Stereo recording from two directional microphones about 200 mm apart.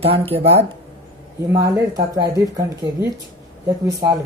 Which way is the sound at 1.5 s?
15° right (ahead or behind).